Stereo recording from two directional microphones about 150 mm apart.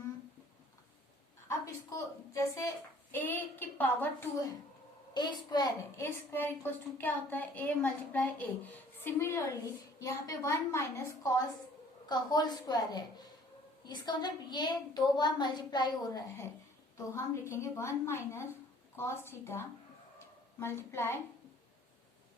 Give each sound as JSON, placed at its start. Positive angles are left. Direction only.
{"t": 1.5, "sound": "a woman's voice", "side_deg": 20}
{"t": 6.0, "sound": "a woman's voice", "side_deg": 15}
{"t": 20.1, "sound": "a sound", "side_deg": 15}